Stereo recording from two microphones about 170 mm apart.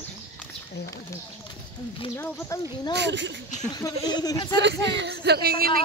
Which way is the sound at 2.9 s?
90° right.